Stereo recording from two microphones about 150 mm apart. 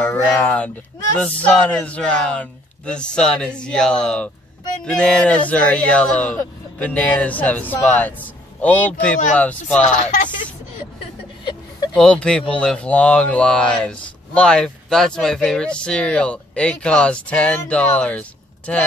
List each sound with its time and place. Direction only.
0.0 s speech: 10° left (ahead or behind)
9.8 s speech: 55° left (ahead or behind)
12.0 s speech: 5° left (ahead or behind)